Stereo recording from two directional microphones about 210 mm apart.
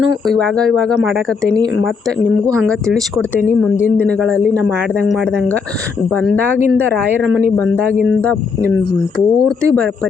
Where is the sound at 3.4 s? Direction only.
40° left (ahead or behind).